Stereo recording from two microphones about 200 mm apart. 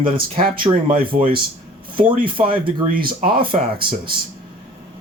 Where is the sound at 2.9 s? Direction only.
45° right (ahead or behind).